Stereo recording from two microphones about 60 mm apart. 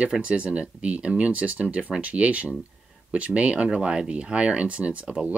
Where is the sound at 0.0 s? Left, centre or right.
Right.